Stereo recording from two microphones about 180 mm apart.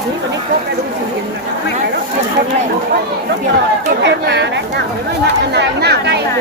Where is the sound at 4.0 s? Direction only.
70° right (ahead or behind).